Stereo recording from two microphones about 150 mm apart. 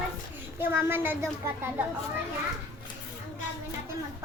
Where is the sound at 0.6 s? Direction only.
15° right (ahead or behind).